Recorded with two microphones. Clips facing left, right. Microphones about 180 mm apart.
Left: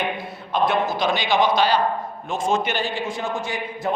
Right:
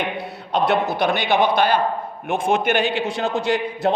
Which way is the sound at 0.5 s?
70° right (ahead or behind).